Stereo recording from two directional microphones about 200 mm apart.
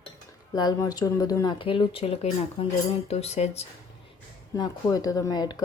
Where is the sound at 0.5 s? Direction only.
20° left (ahead or behind).